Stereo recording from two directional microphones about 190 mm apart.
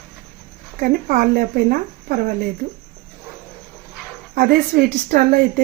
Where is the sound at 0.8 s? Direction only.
50° right (ahead or behind).